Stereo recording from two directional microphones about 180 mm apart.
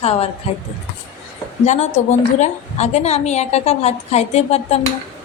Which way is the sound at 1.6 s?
40° left (ahead or behind).